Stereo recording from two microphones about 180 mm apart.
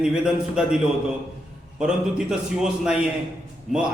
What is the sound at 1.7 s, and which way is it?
A man's voice, 5° right (ahead or behind).